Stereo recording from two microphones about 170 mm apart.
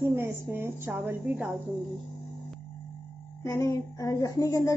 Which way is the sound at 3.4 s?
20° left (ahead or behind).